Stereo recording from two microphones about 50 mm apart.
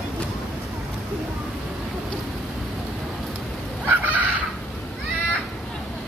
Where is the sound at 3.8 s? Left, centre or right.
Right.